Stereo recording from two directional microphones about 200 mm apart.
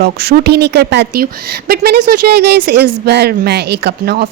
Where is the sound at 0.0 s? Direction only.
55° right (ahead or behind).